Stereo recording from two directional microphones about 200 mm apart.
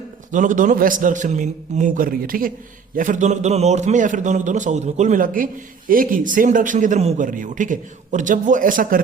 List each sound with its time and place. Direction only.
0.3 s a man's voice: 40° right (ahead or behind)